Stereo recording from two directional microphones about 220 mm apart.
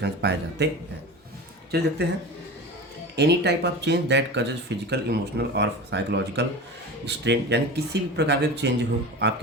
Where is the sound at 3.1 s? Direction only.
50° right (ahead or behind).